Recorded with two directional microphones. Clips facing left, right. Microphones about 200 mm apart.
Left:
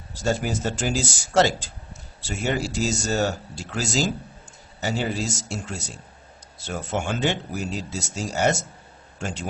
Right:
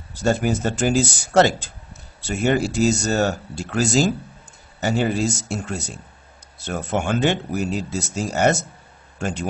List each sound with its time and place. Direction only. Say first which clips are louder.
0.1 s speech: right 5 dB; 55° right (ahead or behind)